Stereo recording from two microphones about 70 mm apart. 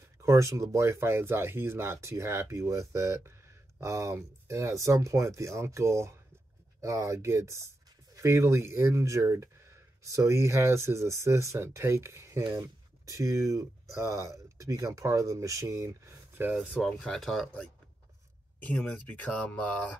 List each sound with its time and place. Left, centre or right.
0.2 s speech: right
12.4 s speech: right
16.8 s speech: centre
18.9 s speech: left